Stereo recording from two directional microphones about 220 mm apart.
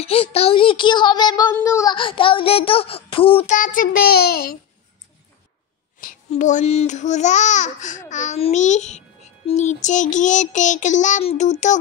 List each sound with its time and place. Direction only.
0.0 s a child's voice: 25° left (ahead or behind)
3.5 s child singing: 35° left (ahead or behind)
5.9 s speech: 35° left (ahead or behind)